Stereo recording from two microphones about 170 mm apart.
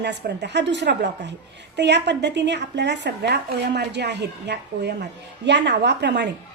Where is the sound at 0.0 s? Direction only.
90° right.